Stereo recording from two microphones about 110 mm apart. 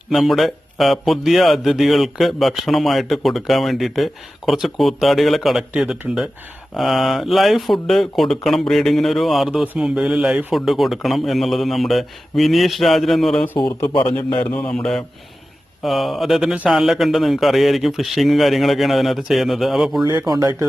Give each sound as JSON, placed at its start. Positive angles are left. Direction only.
{"t": 0.1, "sound": "speech", "side_deg": 0}
{"t": 13.6, "sound": "speech", "side_deg": 45}
{"t": 14.5, "sound": "mantra", "side_deg": 10}
{"t": 15.8, "sound": "speech", "side_deg": 0}
{"t": 20.1, "sound": "speech", "side_deg": -35}